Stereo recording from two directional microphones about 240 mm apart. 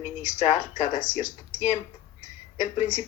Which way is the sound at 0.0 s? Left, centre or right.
Left.